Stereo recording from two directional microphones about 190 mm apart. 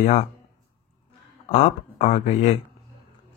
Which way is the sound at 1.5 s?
40° left (ahead or behind).